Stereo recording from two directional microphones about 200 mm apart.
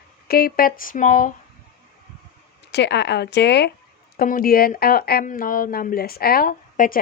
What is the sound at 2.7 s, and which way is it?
Speech, 60° left (ahead or behind).